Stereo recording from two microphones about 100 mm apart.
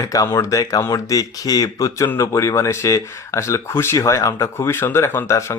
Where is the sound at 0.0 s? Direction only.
35° left (ahead or behind).